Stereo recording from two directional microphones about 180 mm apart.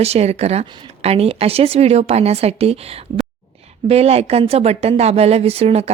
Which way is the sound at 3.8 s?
35° right (ahead or behind).